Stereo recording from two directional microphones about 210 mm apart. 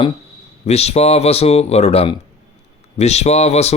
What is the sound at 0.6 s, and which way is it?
Speech, 30° left (ahead or behind).